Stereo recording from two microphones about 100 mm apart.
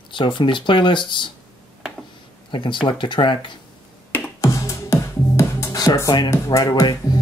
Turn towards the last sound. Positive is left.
turn(degrees=40)  # may be behind; listen again after turning